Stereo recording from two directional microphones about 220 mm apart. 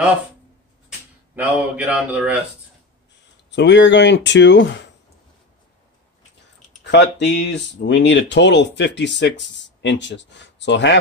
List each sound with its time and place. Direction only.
0.8 s speech: 5° right (ahead or behind)
3.5 s speech: 55° left (ahead or behind)
6.8 s speech: 50° left (ahead or behind)